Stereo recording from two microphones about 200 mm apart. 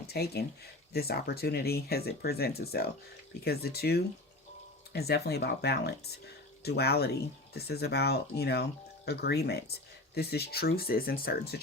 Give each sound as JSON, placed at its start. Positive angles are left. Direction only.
{"t": 0.1, "sound": "speech", "side_deg": 55}